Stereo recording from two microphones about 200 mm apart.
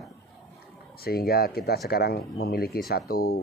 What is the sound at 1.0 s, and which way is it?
Speech, 50° left (ahead or behind).